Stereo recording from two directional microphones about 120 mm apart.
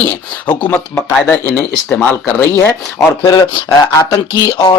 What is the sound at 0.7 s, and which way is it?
Speech, 15° left (ahead or behind).